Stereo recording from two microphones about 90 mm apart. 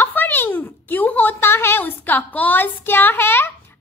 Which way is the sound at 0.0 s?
20° left (ahead or behind).